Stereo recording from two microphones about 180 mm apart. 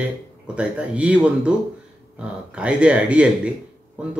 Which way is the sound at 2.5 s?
5° right (ahead or behind).